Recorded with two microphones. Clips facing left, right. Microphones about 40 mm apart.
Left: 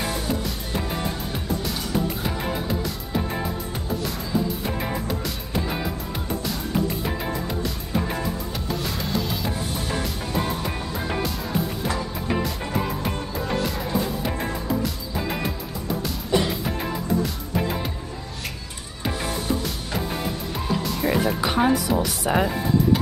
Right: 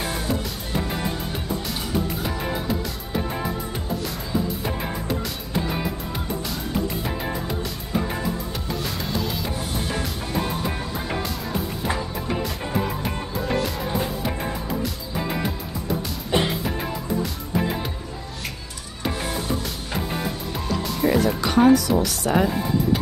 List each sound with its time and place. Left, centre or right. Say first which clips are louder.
4.6 s music: even; centre
8.5 s music: even; centre
16.3 s music: even; right
20.5 s music: left 2 dB; centre
21.9 s speech: right 1 dB; centre